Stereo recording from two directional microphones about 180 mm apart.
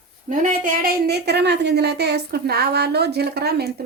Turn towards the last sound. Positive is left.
turn(degrees=-60)  # may be behind; listen again after turning